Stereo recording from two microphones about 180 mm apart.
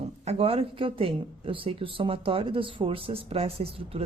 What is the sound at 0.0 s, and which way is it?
Speech, 35° right (ahead or behind).